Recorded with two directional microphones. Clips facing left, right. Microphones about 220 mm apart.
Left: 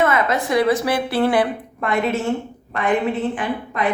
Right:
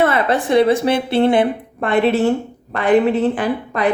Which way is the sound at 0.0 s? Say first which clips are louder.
Right 3 dB; 30° right (ahead or behind).